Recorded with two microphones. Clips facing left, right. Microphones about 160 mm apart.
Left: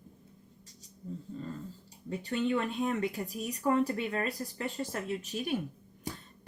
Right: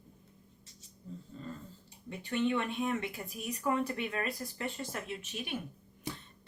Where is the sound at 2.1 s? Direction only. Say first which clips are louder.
Left 1 dB; 35° left (ahead or behind).